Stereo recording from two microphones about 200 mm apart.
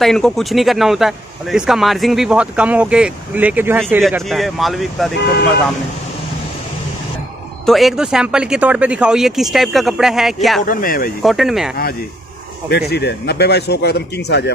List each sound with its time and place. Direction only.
0.0 s speech: centre (ahead or behind)
7.6 s speech: centre (ahead or behind)
10.6 s speech: 45° left (ahead or behind)
11.2 s speech: centre (ahead or behind)
12.6 s a man's voice: 55° left (ahead or behind)